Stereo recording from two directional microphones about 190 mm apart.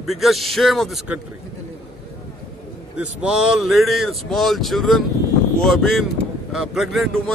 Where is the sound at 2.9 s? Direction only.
5° right (ahead or behind).